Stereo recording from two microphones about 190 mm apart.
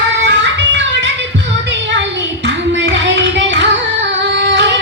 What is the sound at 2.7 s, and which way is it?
Music, 70° right (ahead or behind).